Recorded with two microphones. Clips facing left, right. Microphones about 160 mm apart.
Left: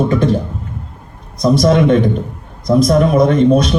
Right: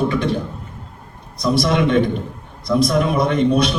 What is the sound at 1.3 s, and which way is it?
A man's voice, 45° left (ahead or behind).